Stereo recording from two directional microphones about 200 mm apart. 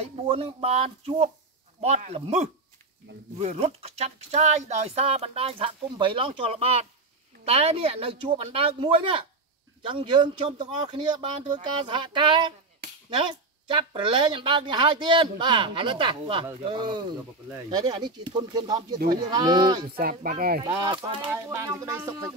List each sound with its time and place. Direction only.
0.2 s speech: 30° right (ahead or behind)
20.0 s speech: 45° right (ahead or behind)
20.6 s speech: 15° right (ahead or behind)
21.3 s speech: 10° right (ahead or behind)